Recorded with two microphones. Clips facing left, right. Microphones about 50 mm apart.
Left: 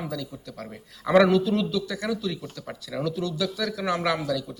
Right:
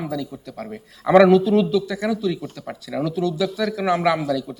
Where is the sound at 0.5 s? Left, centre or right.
Right.